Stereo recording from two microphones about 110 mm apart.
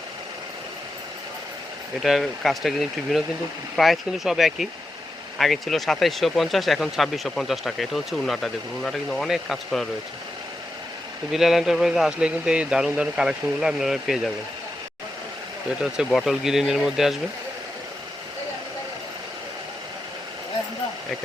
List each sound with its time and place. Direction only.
2.0 s speech: centre (ahead or behind)
11.3 s speech: centre (ahead or behind)
16.0 s speech: centre (ahead or behind)